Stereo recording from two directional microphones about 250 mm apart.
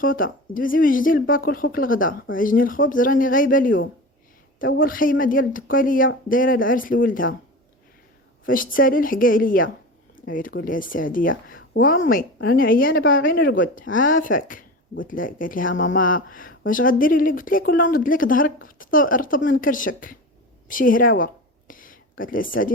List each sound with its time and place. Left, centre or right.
0.0 s speech: left
8.4 s speech: left
15.7 s speech: left
16.0 s speech: left
21.7 s a sound: left
22.2 s speech: left